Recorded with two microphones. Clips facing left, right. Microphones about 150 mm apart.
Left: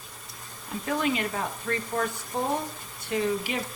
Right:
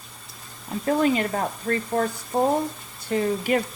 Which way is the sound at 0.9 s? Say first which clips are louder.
Right 6 dB; 35° right (ahead or behind).